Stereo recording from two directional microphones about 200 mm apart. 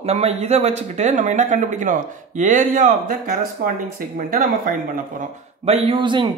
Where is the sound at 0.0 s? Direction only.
30° right (ahead or behind).